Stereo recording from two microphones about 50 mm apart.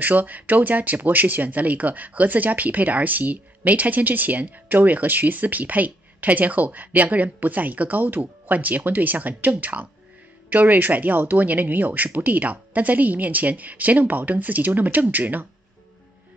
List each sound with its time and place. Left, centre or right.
0.0 s speech: right